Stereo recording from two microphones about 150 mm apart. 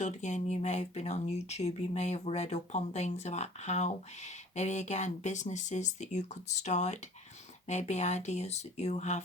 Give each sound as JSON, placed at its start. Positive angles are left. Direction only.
{"t": 0.0, "sound": "speech", "side_deg": 50}